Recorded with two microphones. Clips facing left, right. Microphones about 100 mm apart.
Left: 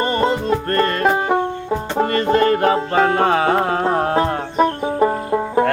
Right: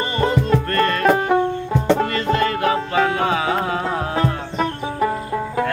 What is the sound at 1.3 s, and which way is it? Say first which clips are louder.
Music: right 1 dB; 20° left (ahead or behind).